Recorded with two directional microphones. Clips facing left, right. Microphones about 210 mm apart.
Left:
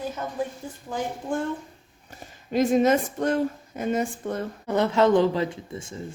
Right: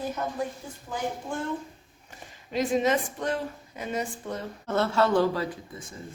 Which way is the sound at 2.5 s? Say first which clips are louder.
Left 5 dB; 45° left (ahead or behind).